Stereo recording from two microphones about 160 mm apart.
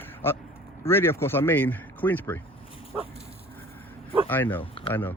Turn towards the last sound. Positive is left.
turn(degrees=15)  # may be behind; listen again after turning